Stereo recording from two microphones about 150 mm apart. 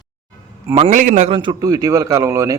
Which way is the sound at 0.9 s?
55° right (ahead or behind).